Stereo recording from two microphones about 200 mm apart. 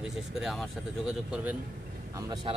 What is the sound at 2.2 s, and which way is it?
Speech, 20° right (ahead or behind).